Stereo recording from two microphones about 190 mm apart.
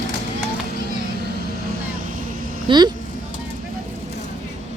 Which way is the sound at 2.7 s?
25° right (ahead or behind).